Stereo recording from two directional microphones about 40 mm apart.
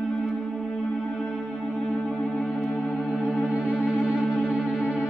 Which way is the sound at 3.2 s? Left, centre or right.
Right.